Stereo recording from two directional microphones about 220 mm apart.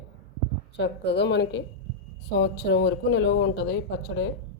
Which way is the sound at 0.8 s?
50° left (ahead or behind).